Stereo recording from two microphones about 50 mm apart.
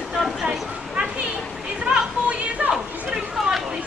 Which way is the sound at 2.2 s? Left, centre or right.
Right.